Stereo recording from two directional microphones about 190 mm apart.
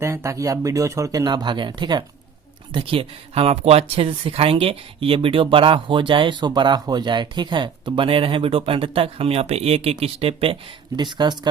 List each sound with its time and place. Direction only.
0.0 s speech: 15° right (ahead or behind)